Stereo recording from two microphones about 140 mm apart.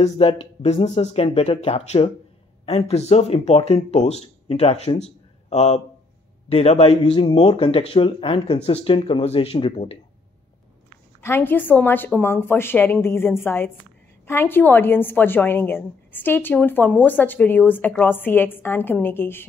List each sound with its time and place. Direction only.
0.0 s speech: 45° left (ahead or behind)
11.1 s a woman's voice: 15° left (ahead or behind)